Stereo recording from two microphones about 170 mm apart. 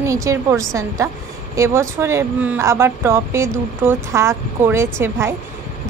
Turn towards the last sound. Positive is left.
turn(degrees=-15)  # may be behind; listen again after turning